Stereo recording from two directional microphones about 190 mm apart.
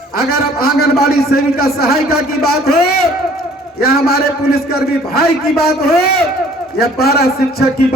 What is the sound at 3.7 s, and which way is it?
A man's voice, 55° left (ahead or behind).